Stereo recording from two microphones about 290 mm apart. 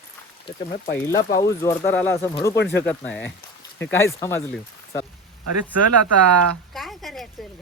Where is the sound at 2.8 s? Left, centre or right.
Centre.